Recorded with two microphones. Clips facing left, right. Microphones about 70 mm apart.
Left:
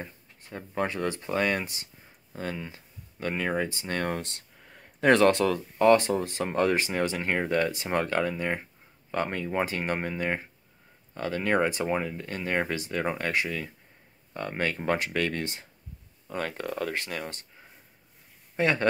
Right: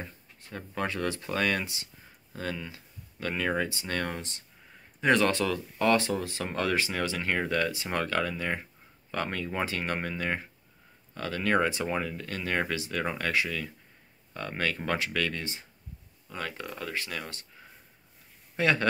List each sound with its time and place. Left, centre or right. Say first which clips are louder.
0.0 s speech: left 1 dB; centre
4.2 s speech: left 3 dB; left
5.0 s speech: left 4 dB; left
18.6 s speech: left 1 dB; left